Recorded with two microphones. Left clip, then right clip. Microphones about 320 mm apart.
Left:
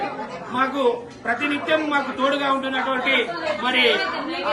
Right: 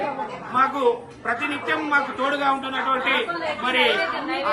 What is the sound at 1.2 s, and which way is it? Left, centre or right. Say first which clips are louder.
A man's voice: left 2 dB; centre.